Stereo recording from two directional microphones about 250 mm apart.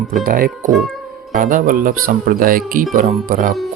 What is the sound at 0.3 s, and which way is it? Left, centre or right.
Speech, right.